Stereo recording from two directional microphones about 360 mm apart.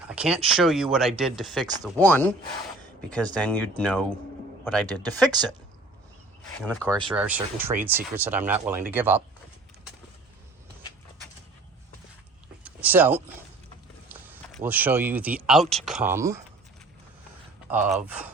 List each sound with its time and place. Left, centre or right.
0.1 s speech: centre
6.6 s speech: centre
12.6 s speech: centre
17.7 s speech: centre